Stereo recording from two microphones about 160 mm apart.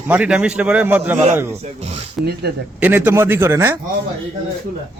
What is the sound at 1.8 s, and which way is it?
Speech, 40° right (ahead or behind).